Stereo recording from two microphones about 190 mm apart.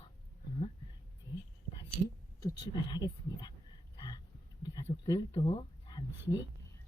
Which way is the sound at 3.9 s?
20° left (ahead or behind).